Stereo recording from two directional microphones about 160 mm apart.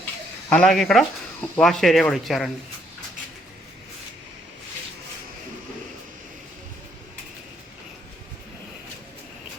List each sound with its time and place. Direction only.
0.5 s speech: 5° left (ahead or behind)